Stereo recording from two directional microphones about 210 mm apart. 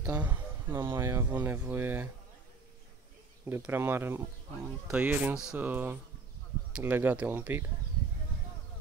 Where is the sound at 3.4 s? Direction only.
10° right (ahead or behind).